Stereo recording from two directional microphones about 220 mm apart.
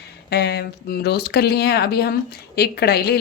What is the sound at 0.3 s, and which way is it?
A woman's voice, 50° left (ahead or behind).